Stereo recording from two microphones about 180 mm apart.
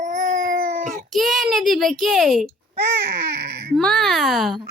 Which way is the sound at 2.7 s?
65° right (ahead or behind).